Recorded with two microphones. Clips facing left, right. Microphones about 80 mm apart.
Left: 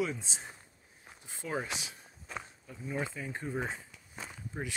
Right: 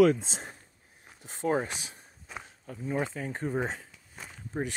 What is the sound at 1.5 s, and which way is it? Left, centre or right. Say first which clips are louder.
Speech: right 6 dB; right.